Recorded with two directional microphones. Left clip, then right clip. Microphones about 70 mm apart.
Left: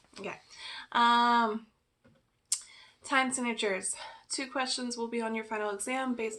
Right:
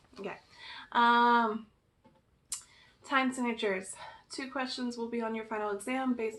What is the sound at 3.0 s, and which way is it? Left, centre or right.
A woman's voice, left.